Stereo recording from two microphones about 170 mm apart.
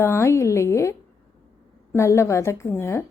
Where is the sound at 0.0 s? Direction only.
15° left (ahead or behind).